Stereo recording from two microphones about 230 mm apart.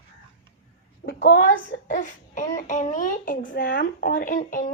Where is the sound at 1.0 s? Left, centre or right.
Left.